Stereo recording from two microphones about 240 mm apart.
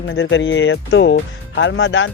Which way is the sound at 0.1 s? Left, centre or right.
Left.